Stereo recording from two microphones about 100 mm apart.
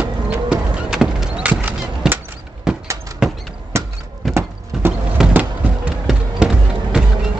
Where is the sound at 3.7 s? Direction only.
25° right (ahead or behind).